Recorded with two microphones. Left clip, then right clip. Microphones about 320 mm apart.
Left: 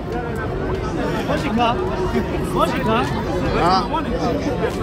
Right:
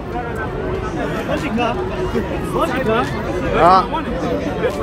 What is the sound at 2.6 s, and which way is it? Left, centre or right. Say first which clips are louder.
Speech: right 1 dB; centre.